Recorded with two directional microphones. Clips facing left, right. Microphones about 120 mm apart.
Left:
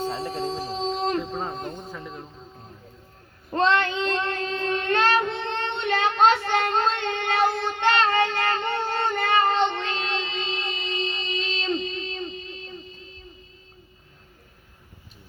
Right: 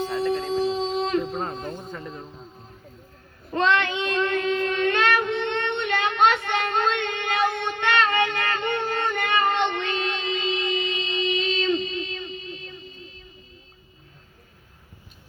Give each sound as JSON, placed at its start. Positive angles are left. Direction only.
{"t": 0.0, "sound": "a sound", "side_deg": 30}
{"t": 1.9, "sound": "snake", "side_deg": 0}
{"t": 3.5, "sound": "child singing", "side_deg": 35}